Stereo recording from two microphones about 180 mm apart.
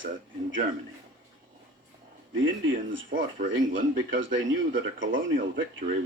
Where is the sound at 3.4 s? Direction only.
90° right.